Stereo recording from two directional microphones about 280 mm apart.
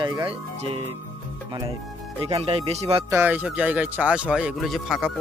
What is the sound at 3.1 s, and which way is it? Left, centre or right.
Speech, centre.